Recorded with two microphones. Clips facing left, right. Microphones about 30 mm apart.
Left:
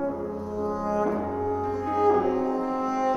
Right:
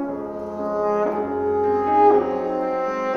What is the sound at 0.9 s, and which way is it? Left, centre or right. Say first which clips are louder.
Brass instrument: right 5 dB; centre.